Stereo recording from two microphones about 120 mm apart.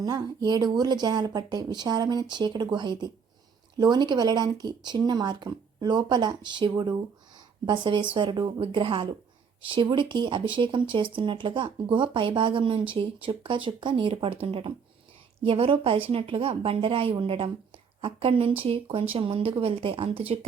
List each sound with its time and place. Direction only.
0.0 s speech: 35° right (ahead or behind); by 20.5 s 55° right (ahead or behind)